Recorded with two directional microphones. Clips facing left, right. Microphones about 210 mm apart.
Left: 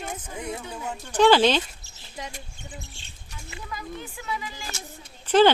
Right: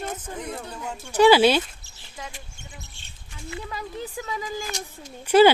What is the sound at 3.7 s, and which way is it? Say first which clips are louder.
Speech: left 1 dB; 35° right (ahead or behind).